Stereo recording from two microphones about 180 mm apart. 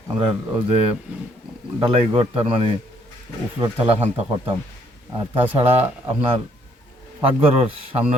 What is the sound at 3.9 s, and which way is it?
Speech, 35° right (ahead or behind).